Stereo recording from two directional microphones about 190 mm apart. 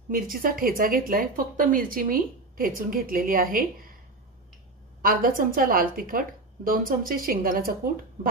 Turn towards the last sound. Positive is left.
turn(degrees=-50)  # may be behind; listen again after turning